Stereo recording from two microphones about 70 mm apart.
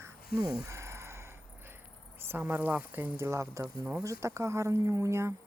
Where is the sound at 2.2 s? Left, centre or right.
Right.